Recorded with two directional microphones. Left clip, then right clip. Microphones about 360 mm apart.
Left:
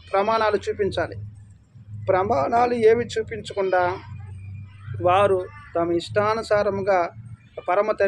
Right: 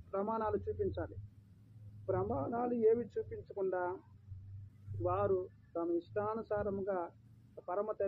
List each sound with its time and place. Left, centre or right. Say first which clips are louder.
0.1 s speech: left 16 dB; centre
2.0 s speech: left 17 dB; centre
5.0 s a man's voice: left 16 dB; centre